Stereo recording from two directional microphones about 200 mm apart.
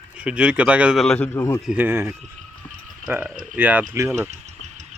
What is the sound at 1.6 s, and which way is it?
Speech, 5° right (ahead or behind).